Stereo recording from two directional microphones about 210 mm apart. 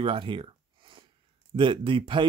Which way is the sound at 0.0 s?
25° right (ahead or behind).